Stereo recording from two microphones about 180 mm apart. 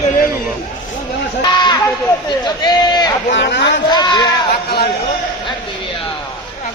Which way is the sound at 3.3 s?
75° left (ahead or behind).